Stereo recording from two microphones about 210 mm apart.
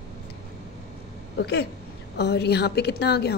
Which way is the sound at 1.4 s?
50° left (ahead or behind).